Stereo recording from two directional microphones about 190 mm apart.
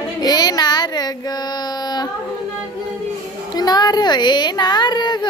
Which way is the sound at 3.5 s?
20° left (ahead or behind).